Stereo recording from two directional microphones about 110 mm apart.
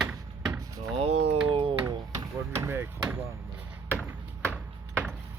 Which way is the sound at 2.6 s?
25° right (ahead or behind).